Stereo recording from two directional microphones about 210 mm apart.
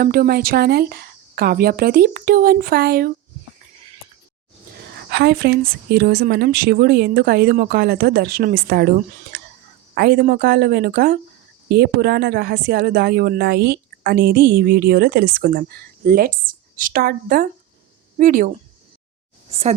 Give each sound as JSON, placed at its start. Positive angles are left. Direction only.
{"t": 0.0, "sound": "speech", "side_deg": -45}
{"t": 4.8, "sound": "speech", "side_deg": -50}
{"t": 19.5, "sound": "a woman's voice", "side_deg": -30}